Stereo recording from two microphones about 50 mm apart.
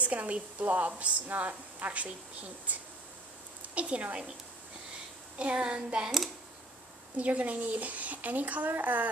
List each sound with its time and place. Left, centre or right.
0.0 s a woman's voice: right
5.4 s a woman's voice: right
7.2 s a woman's voice: right